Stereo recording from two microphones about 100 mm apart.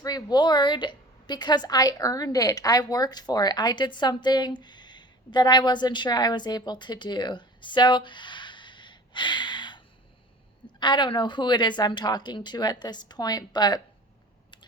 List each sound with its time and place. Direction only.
0.0 s a woman's voice: 40° left (ahead or behind)